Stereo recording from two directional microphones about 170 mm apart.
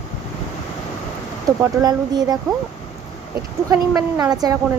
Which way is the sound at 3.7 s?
20° right (ahead or behind).